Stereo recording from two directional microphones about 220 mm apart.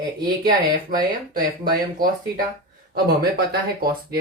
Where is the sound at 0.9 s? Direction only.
40° right (ahead or behind).